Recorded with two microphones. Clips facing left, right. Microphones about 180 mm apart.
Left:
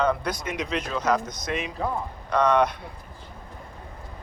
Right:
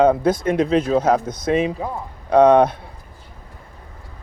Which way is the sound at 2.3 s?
55° right (ahead or behind).